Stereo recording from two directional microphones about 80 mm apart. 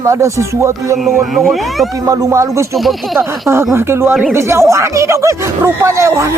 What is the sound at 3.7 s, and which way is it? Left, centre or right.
Speech, right.